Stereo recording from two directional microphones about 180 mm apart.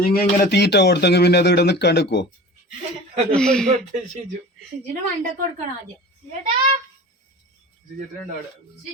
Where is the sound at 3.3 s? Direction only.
5° left (ahead or behind).